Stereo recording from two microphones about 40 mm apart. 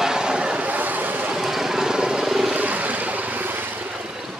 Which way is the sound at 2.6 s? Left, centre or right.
Right.